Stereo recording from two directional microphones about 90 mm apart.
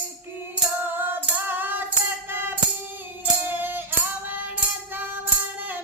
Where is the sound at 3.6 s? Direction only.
20° right (ahead or behind).